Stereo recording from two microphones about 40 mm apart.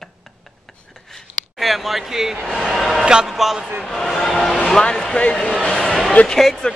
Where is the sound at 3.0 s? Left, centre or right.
Centre.